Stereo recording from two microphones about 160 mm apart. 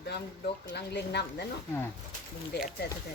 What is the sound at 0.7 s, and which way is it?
Speech, 90° left.